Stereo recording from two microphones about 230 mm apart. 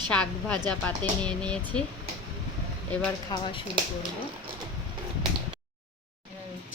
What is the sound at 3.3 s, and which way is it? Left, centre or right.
Speech, centre.